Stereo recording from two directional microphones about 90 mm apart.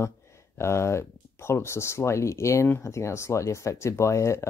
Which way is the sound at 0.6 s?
30° left (ahead or behind).